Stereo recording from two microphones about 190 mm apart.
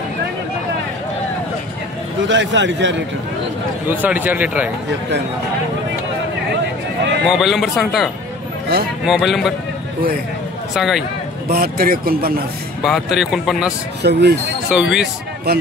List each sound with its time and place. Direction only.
2.2 s a man's voice: 70° right (ahead or behind)
3.9 s speech: 10° right (ahead or behind)
7.2 s speech: centre (ahead or behind)
10.7 s speech: centre (ahead or behind)
11.5 s speech: 50° right (ahead or behind)
12.8 s speech: centre (ahead or behind)
14.0 s speech: 60° right (ahead or behind)
14.7 s speech: 5° right (ahead or behind)